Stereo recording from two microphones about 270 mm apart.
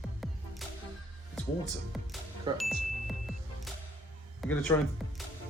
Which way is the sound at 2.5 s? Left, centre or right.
Centre.